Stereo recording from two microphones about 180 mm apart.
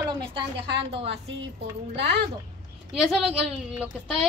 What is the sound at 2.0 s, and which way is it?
Speech, 70° right (ahead or behind).